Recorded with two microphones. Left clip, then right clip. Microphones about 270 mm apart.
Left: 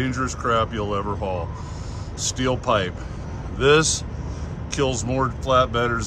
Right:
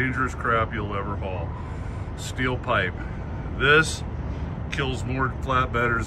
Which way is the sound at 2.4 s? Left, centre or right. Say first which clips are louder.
Left 2 dB; centre.